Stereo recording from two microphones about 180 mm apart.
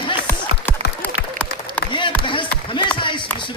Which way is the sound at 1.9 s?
25° left (ahead or behind).